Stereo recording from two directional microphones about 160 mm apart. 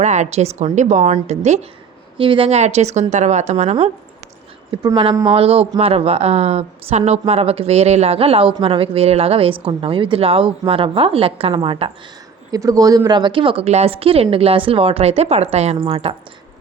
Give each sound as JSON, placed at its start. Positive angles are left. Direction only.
{"t": 0.0, "sound": "a woman's voice", "side_deg": -45}
{"t": 2.1, "sound": "a woman's voice", "side_deg": -35}
{"t": 5.2, "sound": "speech", "side_deg": -35}
{"t": 12.5, "sound": "speech", "side_deg": -20}